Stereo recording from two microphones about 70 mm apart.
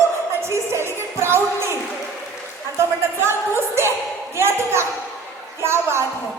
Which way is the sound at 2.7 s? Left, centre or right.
Right.